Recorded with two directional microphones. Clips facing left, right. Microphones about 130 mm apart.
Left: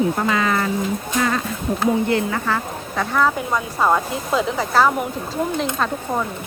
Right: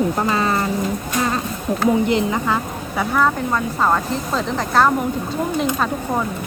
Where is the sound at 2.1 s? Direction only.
20° right (ahead or behind).